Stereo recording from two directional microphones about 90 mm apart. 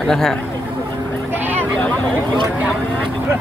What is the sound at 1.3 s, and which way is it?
Vehicle, 20° right (ahead or behind).